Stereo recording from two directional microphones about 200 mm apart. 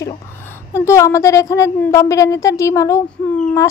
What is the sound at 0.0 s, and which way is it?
A child's voice, 15° left (ahead or behind).